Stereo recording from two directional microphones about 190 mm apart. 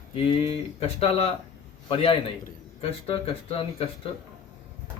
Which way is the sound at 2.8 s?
30° left (ahead or behind).